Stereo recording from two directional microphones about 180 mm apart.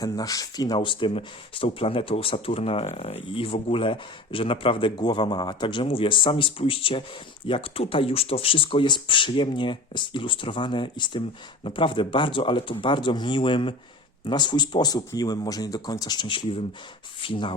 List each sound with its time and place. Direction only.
0.0 s speech: 20° left (ahead or behind)